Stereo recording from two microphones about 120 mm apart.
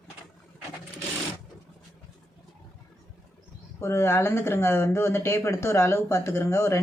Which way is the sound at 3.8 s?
20° left (ahead or behind).